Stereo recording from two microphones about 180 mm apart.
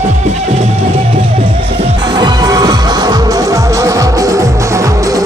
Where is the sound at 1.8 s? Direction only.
25° right (ahead or behind).